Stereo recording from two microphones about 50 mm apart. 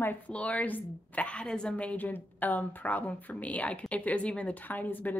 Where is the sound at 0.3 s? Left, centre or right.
Left.